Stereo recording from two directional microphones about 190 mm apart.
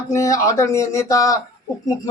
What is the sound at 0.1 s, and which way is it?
Speech, 15° left (ahead or behind).